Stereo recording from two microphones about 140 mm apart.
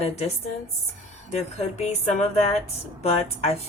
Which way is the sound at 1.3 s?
50° left (ahead or behind).